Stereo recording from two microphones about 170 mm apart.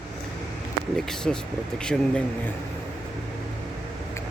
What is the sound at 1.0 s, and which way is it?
Speech, 5° left (ahead or behind).